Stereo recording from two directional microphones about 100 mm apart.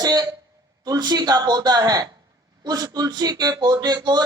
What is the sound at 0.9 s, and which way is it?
Speech, 45° right (ahead or behind).